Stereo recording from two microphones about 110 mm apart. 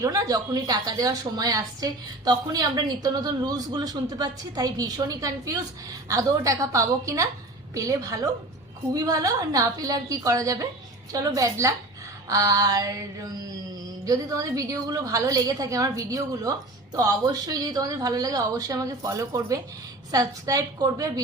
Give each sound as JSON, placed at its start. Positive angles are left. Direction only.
{"t": 0.0, "sound": "a woman's voice", "side_deg": -35}